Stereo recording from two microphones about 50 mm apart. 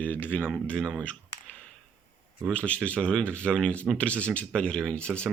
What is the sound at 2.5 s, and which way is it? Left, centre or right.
Speech, left.